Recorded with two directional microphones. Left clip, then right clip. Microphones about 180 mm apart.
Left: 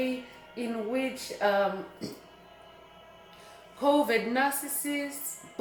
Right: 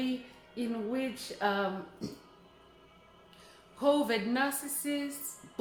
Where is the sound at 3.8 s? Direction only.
25° right (ahead or behind).